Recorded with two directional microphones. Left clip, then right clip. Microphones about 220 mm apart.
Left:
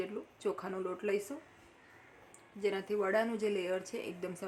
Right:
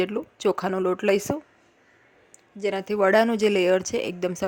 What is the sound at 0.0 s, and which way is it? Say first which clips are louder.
Speech: right 14 dB; 40° right (ahead or behind).